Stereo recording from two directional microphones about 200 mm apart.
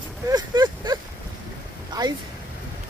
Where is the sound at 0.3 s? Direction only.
20° right (ahead or behind).